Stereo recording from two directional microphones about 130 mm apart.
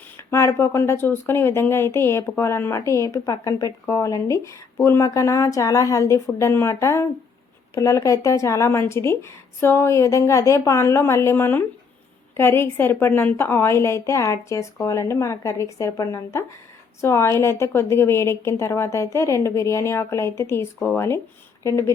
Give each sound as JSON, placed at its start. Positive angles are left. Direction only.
{"t": 0.2, "sound": "speech", "side_deg": 20}